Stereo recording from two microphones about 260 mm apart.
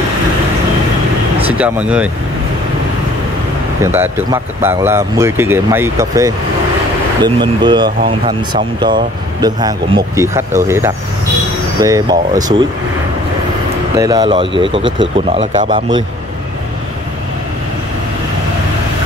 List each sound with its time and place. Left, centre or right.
1.5 s speech: centre
3.8 s speech: centre
7.3 s speech: centre
13.9 s speech: centre